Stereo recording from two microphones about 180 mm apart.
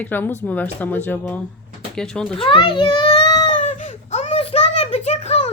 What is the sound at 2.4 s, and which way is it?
A child's voice, 30° left (ahead or behind).